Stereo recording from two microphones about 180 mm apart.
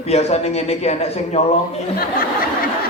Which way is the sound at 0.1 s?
35° left (ahead or behind).